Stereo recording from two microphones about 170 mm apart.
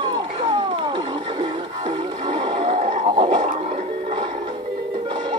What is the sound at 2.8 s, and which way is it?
Music, 30° right (ahead or behind).